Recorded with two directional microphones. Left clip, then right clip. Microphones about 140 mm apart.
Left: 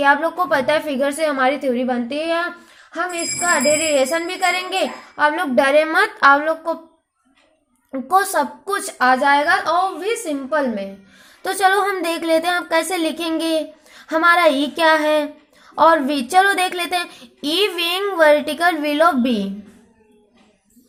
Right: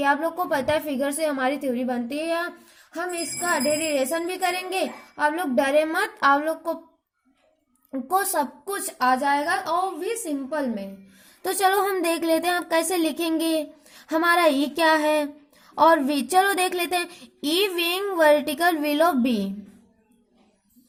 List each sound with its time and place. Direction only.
0.0 s child singing: 30° right (ahead or behind)
7.9 s child singing: 30° right (ahead or behind)